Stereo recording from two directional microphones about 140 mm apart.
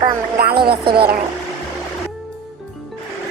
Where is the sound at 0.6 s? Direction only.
35° right (ahead or behind).